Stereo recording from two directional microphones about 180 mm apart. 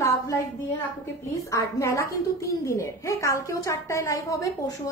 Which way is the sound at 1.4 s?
15° left (ahead or behind).